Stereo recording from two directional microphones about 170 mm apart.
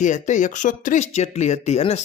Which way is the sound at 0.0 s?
45° left (ahead or behind).